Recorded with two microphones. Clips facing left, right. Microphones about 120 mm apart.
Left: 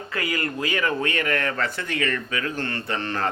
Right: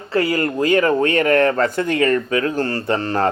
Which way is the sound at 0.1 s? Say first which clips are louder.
Right 10 dB; 35° right (ahead or behind).